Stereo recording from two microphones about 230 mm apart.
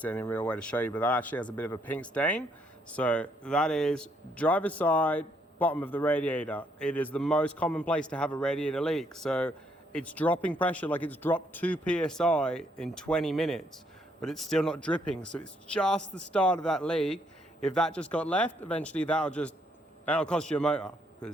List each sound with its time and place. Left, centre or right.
0.0 s speech: centre